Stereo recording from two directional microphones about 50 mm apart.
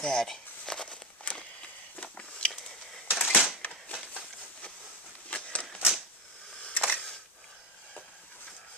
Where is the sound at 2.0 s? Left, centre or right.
Left.